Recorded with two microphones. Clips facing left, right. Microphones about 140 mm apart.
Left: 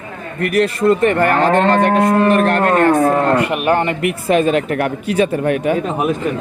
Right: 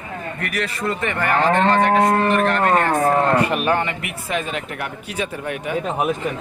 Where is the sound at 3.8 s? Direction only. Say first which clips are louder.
Left 9 dB; 55° left (ahead or behind).